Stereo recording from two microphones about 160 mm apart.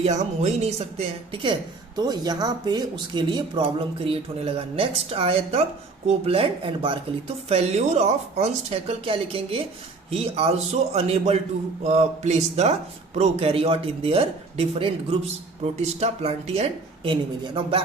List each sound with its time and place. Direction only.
0.0 s speech: 45° right (ahead or behind)